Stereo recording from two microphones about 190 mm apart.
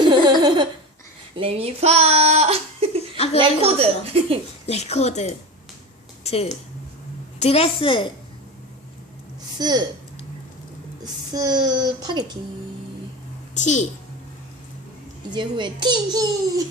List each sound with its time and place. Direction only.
0.1 s laughter: 25° right (ahead or behind)
1.4 s a woman's voice: 30° right (ahead or behind)
4.6 s a woman's voice: 35° left (ahead or behind)
9.6 s speech: 20° right (ahead or behind)
11.0 s speech: 20° right (ahead or behind)
13.5 s a woman's voice: 40° left (ahead or behind)
15.3 s speech: 25° right (ahead or behind)